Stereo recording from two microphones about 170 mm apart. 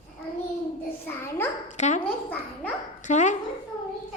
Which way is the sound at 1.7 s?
45° left (ahead or behind).